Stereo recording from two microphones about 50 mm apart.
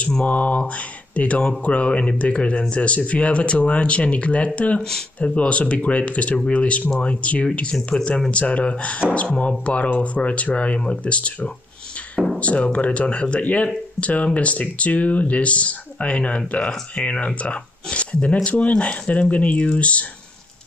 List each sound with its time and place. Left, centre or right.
0.3 s speech: left